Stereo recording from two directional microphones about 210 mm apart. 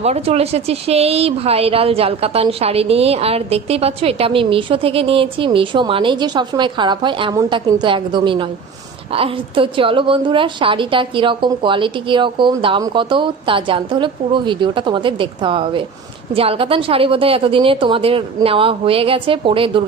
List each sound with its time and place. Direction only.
0.0 s speech: 30° right (ahead or behind)